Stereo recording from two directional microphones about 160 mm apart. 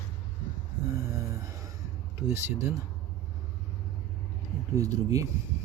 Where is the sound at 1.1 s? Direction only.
20° right (ahead or behind).